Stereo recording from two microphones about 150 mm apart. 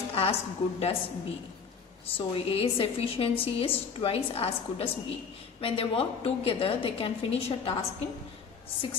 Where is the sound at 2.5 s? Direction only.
40° left (ahead or behind).